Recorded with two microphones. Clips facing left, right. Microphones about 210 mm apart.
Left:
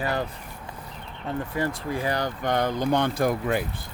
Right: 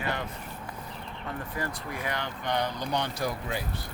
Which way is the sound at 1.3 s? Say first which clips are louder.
Left 7 dB; 25° left (ahead or behind).